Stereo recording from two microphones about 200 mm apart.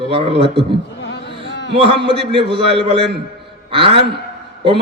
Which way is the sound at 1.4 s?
65° left (ahead or behind).